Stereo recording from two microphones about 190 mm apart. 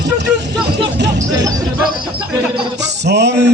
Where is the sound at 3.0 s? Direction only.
65° right (ahead or behind).